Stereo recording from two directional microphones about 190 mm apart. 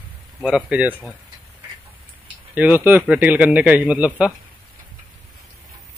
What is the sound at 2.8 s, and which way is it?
Speech, 10° right (ahead or behind).